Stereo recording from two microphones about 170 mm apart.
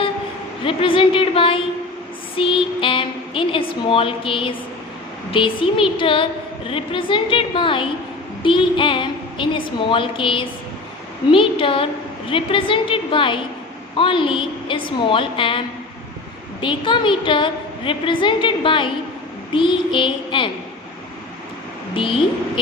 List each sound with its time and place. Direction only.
0.6 s a woman's voice: 30° left (ahead or behind)
8.4 s a sound: 30° left (ahead or behind)
9.9 s a woman's voice: 30° left (ahead or behind)
21.9 s a woman's voice: 30° left (ahead or behind)